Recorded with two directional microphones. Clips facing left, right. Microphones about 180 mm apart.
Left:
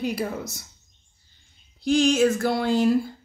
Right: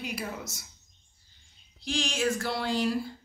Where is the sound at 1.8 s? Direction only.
50° left (ahead or behind).